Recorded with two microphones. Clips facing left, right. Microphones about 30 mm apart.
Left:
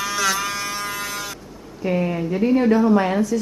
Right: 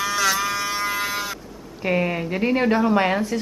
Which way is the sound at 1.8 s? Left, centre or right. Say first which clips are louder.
Even; right.